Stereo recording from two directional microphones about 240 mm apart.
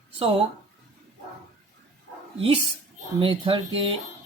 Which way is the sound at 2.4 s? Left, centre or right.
Right.